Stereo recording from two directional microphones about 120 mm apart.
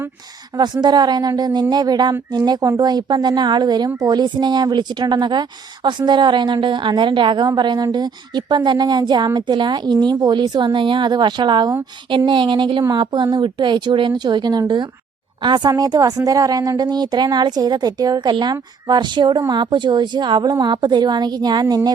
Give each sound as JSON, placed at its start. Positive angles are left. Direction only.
{"t": 0.5, "sound": "a woman's voice", "side_deg": -35}